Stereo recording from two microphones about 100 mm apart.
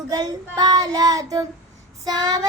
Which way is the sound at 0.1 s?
40° right (ahead or behind).